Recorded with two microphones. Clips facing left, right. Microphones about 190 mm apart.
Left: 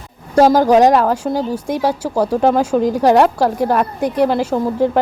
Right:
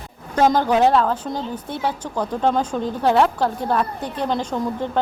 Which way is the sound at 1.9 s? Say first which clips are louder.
Left 8 dB; 35° left (ahead or behind).